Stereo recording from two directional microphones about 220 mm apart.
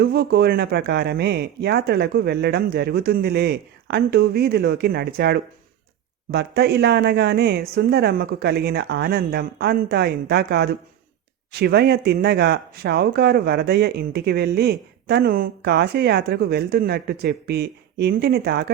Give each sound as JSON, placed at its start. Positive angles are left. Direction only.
{"t": 0.0, "sound": "speech", "side_deg": -45}